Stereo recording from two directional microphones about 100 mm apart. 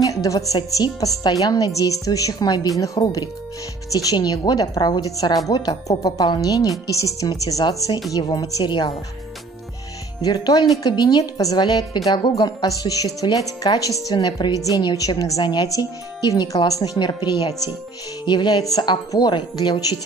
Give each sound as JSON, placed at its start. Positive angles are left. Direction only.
{"t": 0.0, "sound": "a woman's voice", "side_deg": 35}
{"t": 10.2, "sound": "speech", "side_deg": 40}